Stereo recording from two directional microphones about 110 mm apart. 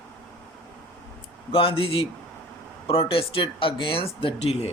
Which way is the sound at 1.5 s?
55° left (ahead or behind).